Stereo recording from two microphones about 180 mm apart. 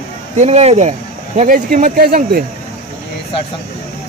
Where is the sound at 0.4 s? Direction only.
35° right (ahead or behind); by 2.4 s 55° right (ahead or behind).